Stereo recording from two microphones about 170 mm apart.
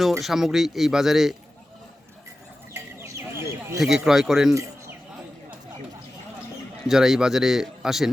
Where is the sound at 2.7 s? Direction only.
15° right (ahead or behind).